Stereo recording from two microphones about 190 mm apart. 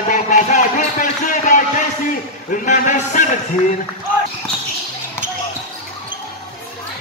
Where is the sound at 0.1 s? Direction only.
40° left (ahead or behind).